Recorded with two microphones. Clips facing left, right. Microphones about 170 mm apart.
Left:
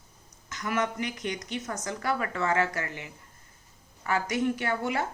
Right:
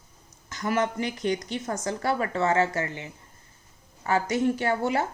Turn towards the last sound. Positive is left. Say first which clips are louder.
# right 4 dB
turn(degrees=-30)  # may be behind; listen again after turning